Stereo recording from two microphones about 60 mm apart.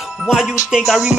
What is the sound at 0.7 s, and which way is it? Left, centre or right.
Music, centre.